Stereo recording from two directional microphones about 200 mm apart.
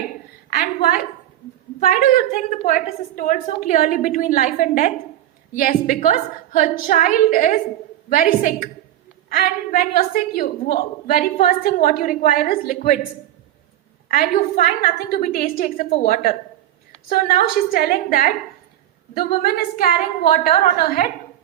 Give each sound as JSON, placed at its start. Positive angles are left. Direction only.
{"t": 0.5, "sound": "a woman's voice", "side_deg": 45}
{"t": 14.1, "sound": "a woman's voice", "side_deg": 45}